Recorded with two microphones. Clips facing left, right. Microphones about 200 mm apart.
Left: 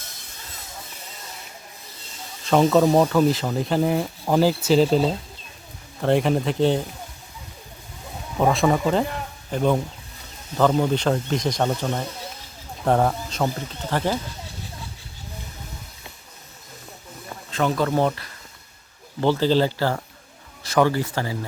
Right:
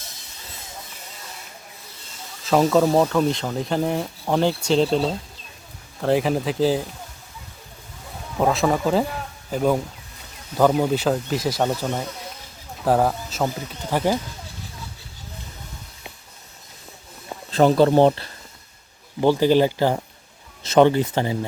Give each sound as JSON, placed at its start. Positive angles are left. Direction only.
{"t": 2.4, "sound": "speech", "side_deg": 0}
{"t": 8.4, "sound": "speech", "side_deg": 0}
{"t": 17.5, "sound": "speech", "side_deg": -35}
{"t": 19.2, "sound": "speech", "side_deg": -15}